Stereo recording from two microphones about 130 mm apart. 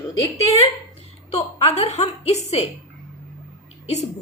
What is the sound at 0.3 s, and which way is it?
A woman's voice, 55° left (ahead or behind).